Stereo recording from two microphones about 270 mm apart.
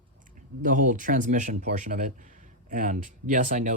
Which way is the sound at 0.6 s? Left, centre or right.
Right.